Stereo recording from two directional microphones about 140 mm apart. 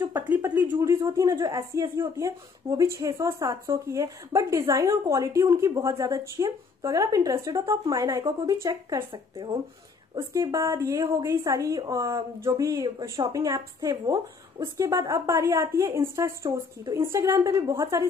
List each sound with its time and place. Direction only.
0.1 s speech: 15° right (ahead or behind); by 9.6 s 35° right (ahead or behind)
10.3 s speech: 20° right (ahead or behind)